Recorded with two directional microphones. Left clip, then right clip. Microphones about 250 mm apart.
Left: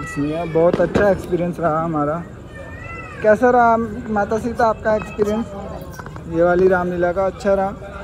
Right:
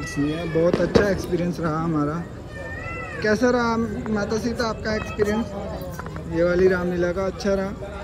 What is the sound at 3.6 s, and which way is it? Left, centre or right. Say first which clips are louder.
Speech: left 9 dB; centre.